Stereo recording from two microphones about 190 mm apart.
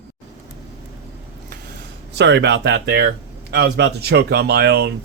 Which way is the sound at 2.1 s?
65° right (ahead or behind).